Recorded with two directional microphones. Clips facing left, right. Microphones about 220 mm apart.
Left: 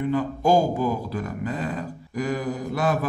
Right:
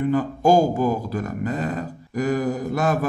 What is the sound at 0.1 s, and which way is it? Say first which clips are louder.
A man's voice: right 2 dB; 45° right (ahead or behind).